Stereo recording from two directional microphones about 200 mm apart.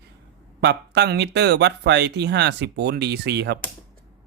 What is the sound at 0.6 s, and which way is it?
Speech, 55° right (ahead or behind).